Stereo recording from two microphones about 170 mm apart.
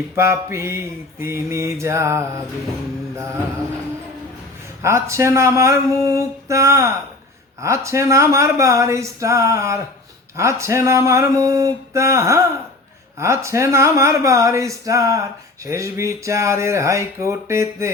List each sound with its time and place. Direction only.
0.2 s speech: 15° right (ahead or behind)
4.8 s speech: 15° right (ahead or behind)